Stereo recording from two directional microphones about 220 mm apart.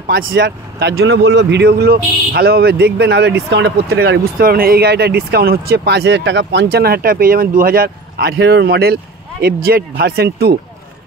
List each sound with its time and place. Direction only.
0.1 s speech: 60° right (ahead or behind)